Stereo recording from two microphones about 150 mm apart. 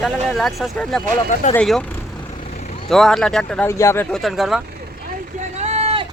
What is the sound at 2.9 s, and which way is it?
Speech, 5° left (ahead or behind).